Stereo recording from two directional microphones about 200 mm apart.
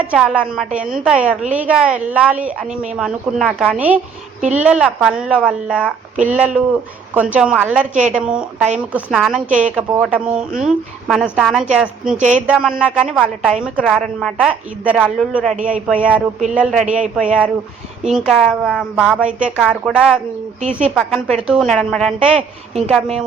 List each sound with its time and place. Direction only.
0.0 s speech: 5° right (ahead or behind)
22.4 s a woman's voice: 30° right (ahead or behind)